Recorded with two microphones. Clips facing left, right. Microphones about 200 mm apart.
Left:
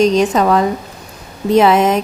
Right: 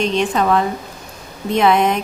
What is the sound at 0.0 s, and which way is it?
Speech, 40° left (ahead or behind).